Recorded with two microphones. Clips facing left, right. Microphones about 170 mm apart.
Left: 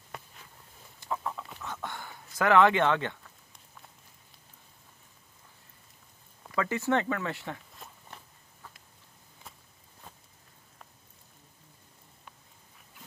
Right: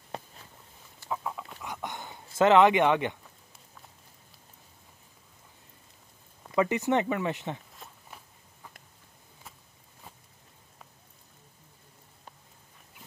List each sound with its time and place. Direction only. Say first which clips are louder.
1.1 s a sound: even; 5° right (ahead or behind)
6.5 s speech: right 3 dB; 20° right (ahead or behind)
7.7 s walk: even; centre (ahead or behind)